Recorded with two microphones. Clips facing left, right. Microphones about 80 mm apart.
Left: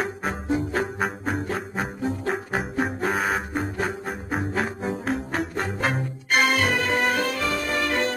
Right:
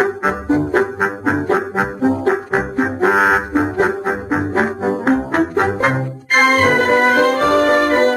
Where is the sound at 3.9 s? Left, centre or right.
Right.